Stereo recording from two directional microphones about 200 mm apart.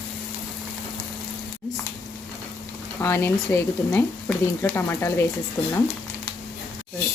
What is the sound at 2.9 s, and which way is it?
Speech, 15° left (ahead or behind).